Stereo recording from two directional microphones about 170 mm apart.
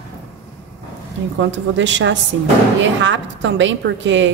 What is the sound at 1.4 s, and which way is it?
A woman's voice, 90° right.